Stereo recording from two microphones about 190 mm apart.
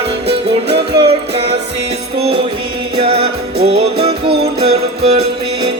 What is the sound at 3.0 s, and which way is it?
Music, 30° right (ahead or behind).